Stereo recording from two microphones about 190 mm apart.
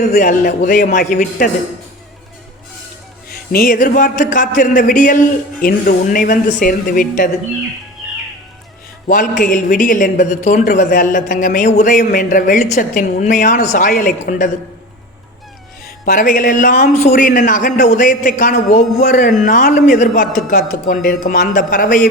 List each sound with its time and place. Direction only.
0.0 s a woman's voice: 40° left (ahead or behind)
3.2 s a woman's voice: 50° left (ahead or behind)
9.4 s a woman's voice: 45° left (ahead or behind)
16.0 s a woman's voice: 50° left (ahead or behind)